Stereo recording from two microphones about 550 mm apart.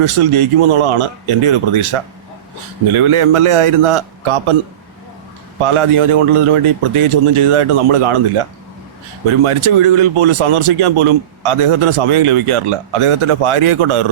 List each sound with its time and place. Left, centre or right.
0.0 s speech: right
5.6 s speech: right